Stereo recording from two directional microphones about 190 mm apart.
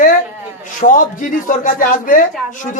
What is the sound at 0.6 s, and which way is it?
A man's voice, 45° left (ahead or behind).